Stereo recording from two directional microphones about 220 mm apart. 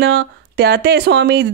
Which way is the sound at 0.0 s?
50° right (ahead or behind).